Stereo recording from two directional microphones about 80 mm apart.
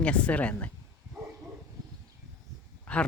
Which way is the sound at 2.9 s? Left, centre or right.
Centre.